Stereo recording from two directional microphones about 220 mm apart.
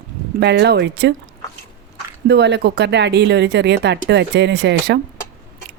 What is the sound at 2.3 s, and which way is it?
Speech, 50° right (ahead or behind).